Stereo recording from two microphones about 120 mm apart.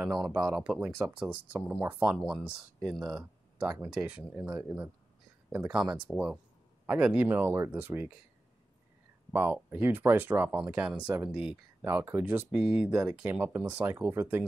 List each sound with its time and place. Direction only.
0.0 s speech: 5° right (ahead or behind)
2.2 s speech: centre (ahead or behind); by 8.1 s 15° right (ahead or behind)
9.3 s speech: 15° right (ahead or behind)
12.5 s speech: 5° right (ahead or behind)